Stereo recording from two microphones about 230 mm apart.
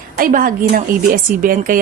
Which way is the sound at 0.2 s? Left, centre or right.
Right.